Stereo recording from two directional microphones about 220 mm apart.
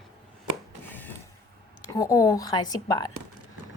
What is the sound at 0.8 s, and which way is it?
Mechanisms, 10° left (ahead or behind).